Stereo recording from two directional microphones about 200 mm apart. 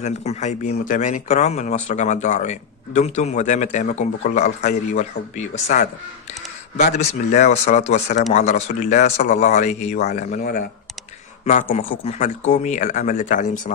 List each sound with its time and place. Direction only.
0.0 s speech: 35° left (ahead or behind)